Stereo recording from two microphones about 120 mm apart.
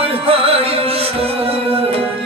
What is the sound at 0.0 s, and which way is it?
Music, 50° right (ahead or behind).